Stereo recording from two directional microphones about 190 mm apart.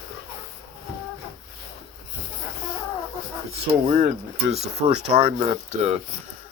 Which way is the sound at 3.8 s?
40° right (ahead or behind).